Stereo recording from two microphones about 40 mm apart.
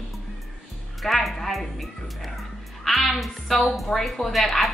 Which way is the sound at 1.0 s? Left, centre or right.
Centre.